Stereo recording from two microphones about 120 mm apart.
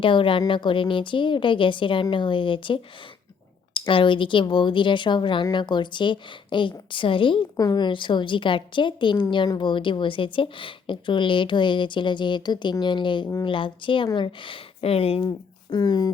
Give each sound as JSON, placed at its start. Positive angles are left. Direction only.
{"t": 0.0, "sound": "speech", "side_deg": 45}
{"t": 7.5, "sound": "a woman's voice", "side_deg": 30}
{"t": 15.7, "sound": "a woman's voice", "side_deg": 35}